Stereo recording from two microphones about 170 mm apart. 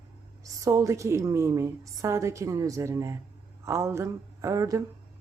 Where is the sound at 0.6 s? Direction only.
20° right (ahead or behind).